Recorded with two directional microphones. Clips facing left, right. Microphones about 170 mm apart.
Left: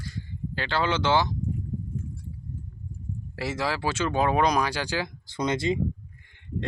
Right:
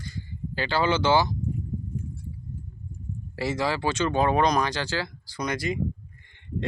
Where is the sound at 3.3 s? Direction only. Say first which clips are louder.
Right 2 dB; centre (ahead or behind); by 5.7 s 25° left (ahead or behind).